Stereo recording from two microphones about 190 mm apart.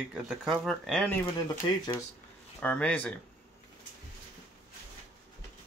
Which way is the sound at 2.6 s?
5° left (ahead or behind).